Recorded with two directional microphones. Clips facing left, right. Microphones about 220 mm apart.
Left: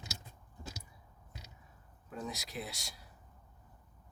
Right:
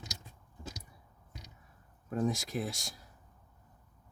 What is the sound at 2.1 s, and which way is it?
Speech, 50° right (ahead or behind).